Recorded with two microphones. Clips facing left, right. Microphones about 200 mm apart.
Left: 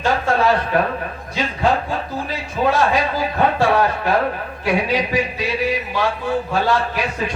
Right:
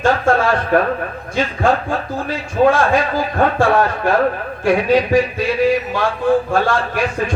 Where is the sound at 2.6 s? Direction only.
50° right (ahead or behind).